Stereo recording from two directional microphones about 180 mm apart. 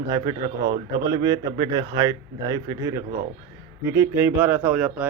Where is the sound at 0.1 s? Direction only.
20° right (ahead or behind).